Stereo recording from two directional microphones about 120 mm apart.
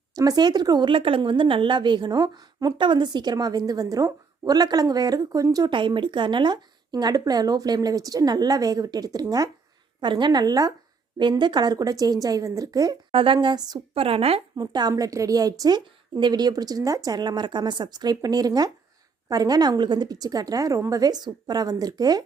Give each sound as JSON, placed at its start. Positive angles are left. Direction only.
{"t": 0.2, "sound": "a woman's voice", "side_deg": -35}
{"t": 13.1, "sound": "a woman's voice", "side_deg": -50}
{"t": 13.9, "sound": "a woman's voice", "side_deg": -50}
{"t": 14.5, "sound": "a woman's voice", "side_deg": -35}